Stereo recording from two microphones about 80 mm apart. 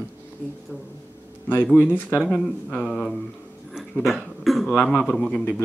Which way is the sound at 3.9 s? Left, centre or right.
Centre.